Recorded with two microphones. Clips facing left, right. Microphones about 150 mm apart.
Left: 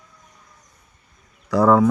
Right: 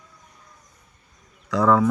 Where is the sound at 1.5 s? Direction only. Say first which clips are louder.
Left 3 dB; 30° left (ahead or behind).